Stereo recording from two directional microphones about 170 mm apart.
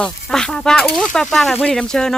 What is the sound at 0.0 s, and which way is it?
Speech, 5° left (ahead or behind).